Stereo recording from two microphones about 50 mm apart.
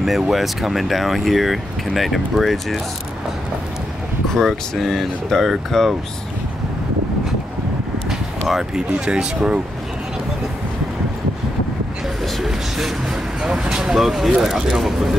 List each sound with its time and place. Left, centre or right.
0.0 s speech: centre
4.3 s speech: centre
8.1 s a sound: centre
8.9 s speech: centre
12.4 s speech: centre